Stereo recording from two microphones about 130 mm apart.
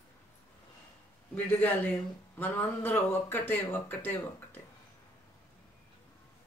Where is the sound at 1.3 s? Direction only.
15° left (ahead or behind).